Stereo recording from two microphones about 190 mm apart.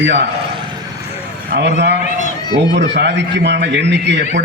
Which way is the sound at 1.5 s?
65° right (ahead or behind).